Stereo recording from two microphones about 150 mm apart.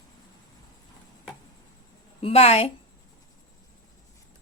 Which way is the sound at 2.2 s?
40° left (ahead or behind).